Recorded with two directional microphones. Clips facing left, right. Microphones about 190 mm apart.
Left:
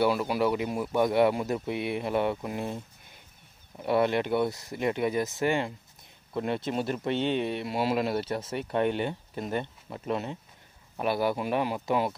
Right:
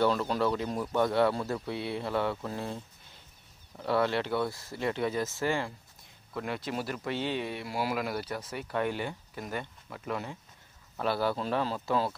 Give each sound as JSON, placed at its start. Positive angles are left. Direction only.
{"t": 0.0, "sound": "speech", "side_deg": 10}